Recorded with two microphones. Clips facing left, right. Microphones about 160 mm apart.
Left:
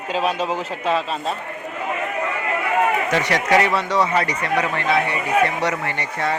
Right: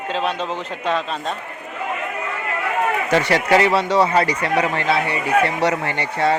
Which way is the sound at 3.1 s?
30° right (ahead or behind).